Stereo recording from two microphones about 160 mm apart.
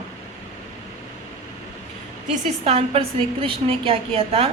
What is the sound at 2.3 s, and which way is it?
A woman's voice, 45° right (ahead or behind).